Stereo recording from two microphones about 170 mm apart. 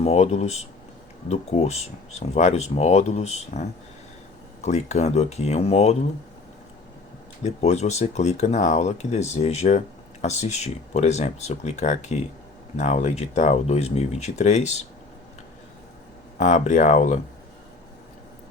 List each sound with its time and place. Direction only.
0.0 s speech: 40° left (ahead or behind)
7.4 s speech: 40° left (ahead or behind)
16.4 s speech: 45° left (ahead or behind)